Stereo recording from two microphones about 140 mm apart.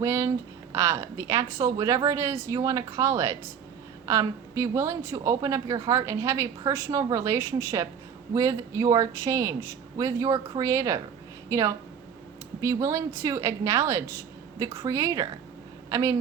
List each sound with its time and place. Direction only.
0.0 s a woman's voice: 20° right (ahead or behind)